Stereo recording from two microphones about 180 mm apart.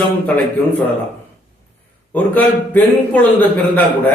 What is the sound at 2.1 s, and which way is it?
A man's voice, 10° left (ahead or behind).